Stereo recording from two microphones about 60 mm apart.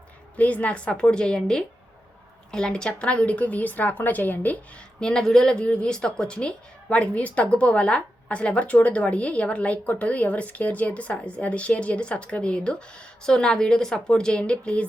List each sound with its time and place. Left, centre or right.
0.3 s a woman's voice: left
4.9 s a woman's voice: centre